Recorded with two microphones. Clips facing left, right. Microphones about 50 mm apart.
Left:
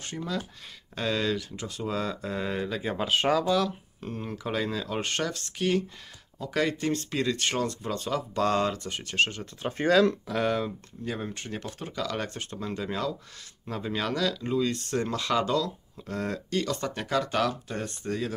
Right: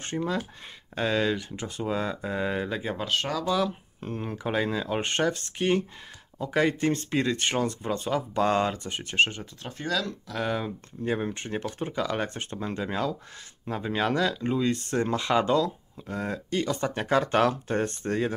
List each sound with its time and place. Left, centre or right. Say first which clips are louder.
0.0 s speech: right 4 dB; right; by 2.8 s centre
3.0 s speech: left 7 dB; centre
3.6 s speech: right 2 dB; right
9.7 s speech: left 8 dB; left
10.4 s speech: left 1 dB; centre
11.1 s speech: right 5 dB; right
16.1 s speech: even; centre; by 18.3 s right